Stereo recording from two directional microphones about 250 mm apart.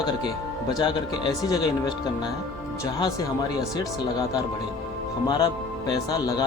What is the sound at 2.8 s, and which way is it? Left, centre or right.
Speech, centre.